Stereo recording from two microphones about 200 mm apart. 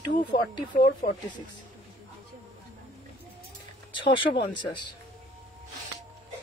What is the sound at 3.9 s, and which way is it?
Music, 25° left (ahead or behind).